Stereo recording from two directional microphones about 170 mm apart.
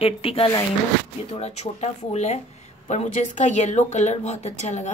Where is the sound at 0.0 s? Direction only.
35° left (ahead or behind).